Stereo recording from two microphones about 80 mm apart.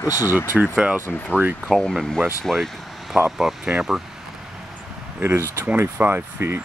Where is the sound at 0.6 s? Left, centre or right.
Centre.